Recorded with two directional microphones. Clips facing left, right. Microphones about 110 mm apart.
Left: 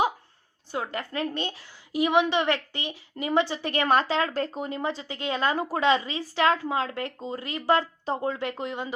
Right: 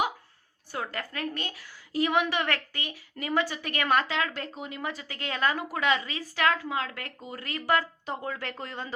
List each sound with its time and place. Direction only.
0.7 s a woman's voice: 20° left (ahead or behind)